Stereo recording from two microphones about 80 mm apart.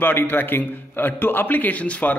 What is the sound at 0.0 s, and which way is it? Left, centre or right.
A man's voice, left.